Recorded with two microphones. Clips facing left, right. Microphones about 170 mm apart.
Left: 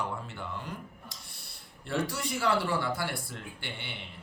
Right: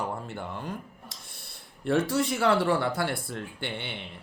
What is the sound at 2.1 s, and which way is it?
Speech, 60° right (ahead or behind).